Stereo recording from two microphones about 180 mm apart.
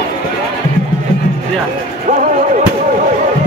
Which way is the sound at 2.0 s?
45° right (ahead or behind).